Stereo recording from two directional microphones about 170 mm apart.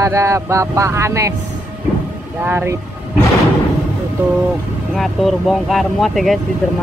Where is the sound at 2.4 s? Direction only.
15° right (ahead or behind).